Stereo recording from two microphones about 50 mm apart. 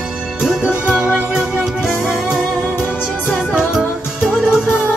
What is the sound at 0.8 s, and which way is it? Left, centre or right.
Music, centre.